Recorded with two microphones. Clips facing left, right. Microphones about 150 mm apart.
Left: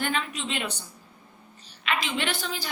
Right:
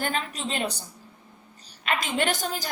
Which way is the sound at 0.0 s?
40° right (ahead or behind).